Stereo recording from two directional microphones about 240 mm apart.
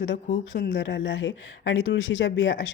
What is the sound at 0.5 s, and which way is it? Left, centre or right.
Speech, left.